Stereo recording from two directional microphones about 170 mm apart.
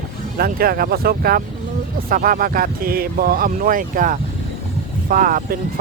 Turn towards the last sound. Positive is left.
turn(degrees=-55)  # may be behind; listen again after turning